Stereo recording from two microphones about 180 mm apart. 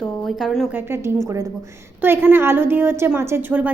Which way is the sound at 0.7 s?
15° right (ahead or behind).